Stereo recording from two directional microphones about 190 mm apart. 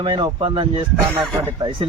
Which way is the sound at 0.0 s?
25° right (ahead or behind).